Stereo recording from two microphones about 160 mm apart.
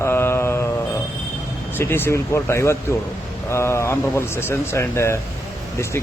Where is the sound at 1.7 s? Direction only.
15° left (ahead or behind).